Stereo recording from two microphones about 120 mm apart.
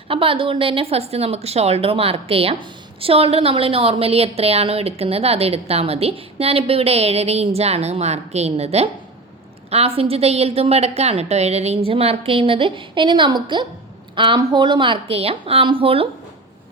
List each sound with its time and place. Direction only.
0.1 s a woman's voice: 45° right (ahead or behind)